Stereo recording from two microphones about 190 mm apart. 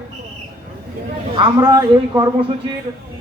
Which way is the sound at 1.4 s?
20° right (ahead or behind).